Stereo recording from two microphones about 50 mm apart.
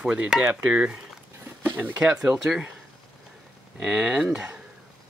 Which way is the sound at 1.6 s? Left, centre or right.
Right.